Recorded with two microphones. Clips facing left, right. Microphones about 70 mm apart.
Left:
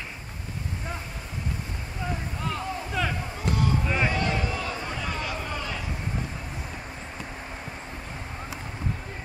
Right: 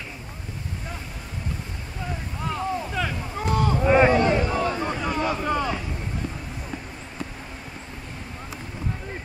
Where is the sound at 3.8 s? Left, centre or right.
Right.